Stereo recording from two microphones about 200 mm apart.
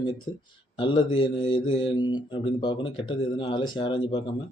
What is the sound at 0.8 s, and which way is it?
Speech, 25° left (ahead or behind).